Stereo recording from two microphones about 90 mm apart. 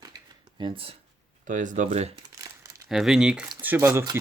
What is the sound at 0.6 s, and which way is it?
Speech, 85° right.